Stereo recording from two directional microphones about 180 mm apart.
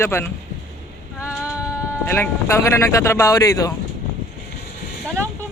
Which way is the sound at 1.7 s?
15° left (ahead or behind).